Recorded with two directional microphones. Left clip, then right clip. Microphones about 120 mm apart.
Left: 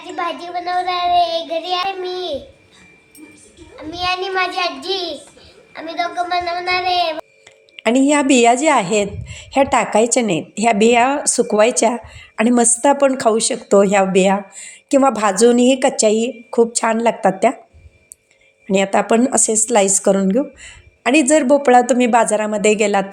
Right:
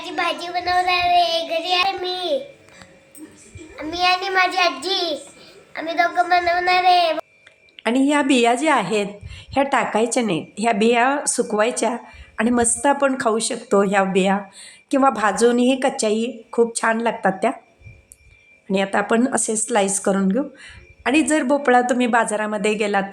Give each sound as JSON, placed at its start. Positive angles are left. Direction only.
{"t": 0.4, "sound": "child singing", "side_deg": 0}
{"t": 3.8, "sound": "child singing", "side_deg": 5}
{"t": 5.7, "sound": "a woman's voice", "side_deg": 20}
{"t": 7.8, "sound": "a woman's voice", "side_deg": 35}
{"t": 11.5, "sound": "a woman's voice", "side_deg": 35}
{"t": 18.7, "sound": "a woman's voice", "side_deg": 35}